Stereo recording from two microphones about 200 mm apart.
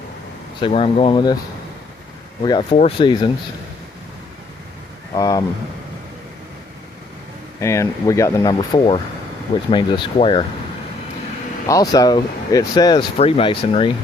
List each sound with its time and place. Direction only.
0.6 s speech: 30° left (ahead or behind)
2.4 s speech: 25° left (ahead or behind)
5.1 s speech: 20° left (ahead or behind)
7.6 s speech: 15° left (ahead or behind)
11.7 s speech: 20° left (ahead or behind)